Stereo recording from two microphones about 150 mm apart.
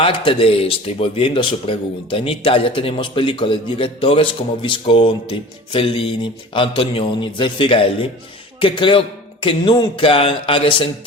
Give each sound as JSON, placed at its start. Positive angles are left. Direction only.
{"t": 0.0, "sound": "speech", "side_deg": 35}